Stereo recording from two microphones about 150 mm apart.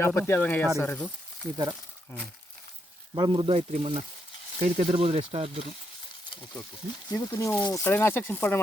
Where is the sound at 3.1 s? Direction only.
35° right (ahead or behind).